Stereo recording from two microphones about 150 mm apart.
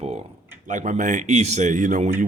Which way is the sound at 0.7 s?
60° right (ahead or behind).